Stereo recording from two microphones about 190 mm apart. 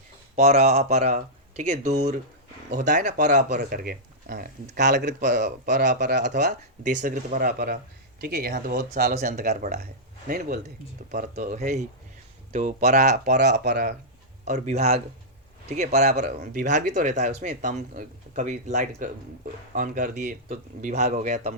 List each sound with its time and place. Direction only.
0.3 s speech: 35° right (ahead or behind)
3.7 s speech: 55° right (ahead or behind)
7.0 s speech: 40° right (ahead or behind)
7.3 s speech: 50° right (ahead or behind)
11.1 s speech: 40° right (ahead or behind)
13.2 s speech: 60° right (ahead or behind)
14.4 s speech: 40° right (ahead or behind)